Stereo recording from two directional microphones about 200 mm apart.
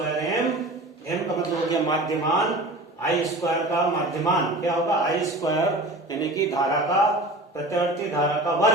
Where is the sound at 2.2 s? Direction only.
Centre (ahead or behind).